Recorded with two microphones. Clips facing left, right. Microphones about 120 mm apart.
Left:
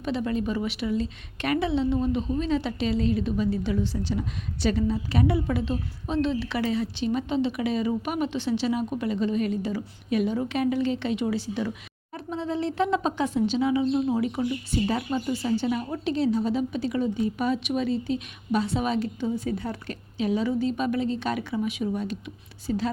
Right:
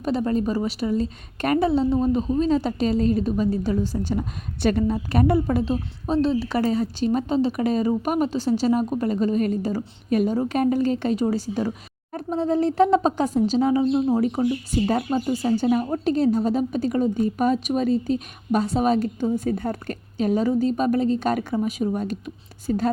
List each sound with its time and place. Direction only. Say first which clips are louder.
0.0 s a woman's voice: right 4 dB; 40° right (ahead or behind)